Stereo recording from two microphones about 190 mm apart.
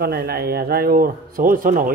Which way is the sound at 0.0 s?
55° right (ahead or behind).